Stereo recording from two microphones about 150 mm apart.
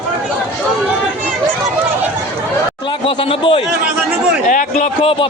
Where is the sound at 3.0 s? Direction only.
40° left (ahead or behind).